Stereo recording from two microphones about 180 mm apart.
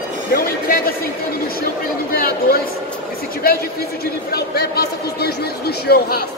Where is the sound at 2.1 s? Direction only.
55° left (ahead or behind).